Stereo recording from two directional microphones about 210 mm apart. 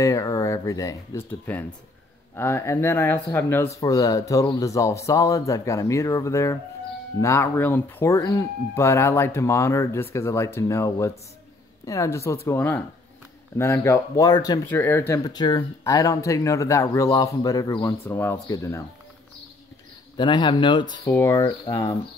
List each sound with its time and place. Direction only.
0.0 s speech: 15° left (ahead or behind)
20.2 s speech: 20° left (ahead or behind)